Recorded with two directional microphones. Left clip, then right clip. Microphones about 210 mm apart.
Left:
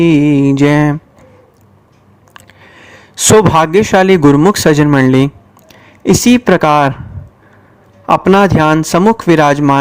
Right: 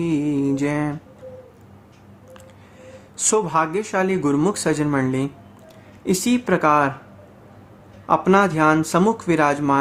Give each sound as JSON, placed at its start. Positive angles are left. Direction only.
{"t": 0.0, "sound": "a man's voice", "side_deg": 35}
{"t": 2.3, "sound": "a sound", "side_deg": 35}
{"t": 4.5, "sound": "speech", "side_deg": 40}
{"t": 8.0, "sound": "a man's voice", "side_deg": 35}